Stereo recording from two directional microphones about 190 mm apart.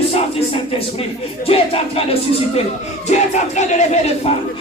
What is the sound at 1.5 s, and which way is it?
Music, 30° left (ahead or behind).